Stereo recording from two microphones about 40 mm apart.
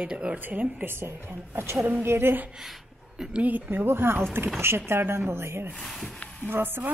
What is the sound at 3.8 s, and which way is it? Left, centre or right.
Speech, right.